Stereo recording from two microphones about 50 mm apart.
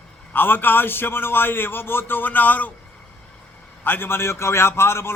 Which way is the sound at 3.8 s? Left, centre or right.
Left.